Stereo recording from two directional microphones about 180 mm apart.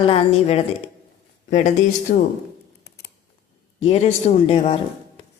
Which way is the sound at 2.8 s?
65° left (ahead or behind).